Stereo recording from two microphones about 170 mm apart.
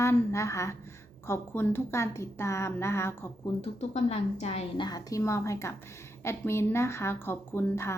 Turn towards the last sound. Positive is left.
turn(degrees=15)  # may be behind; listen again after turning